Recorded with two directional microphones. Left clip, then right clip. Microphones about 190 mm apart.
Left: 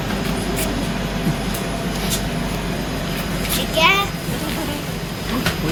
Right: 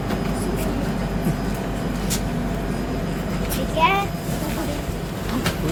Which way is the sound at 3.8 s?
30° right (ahead or behind).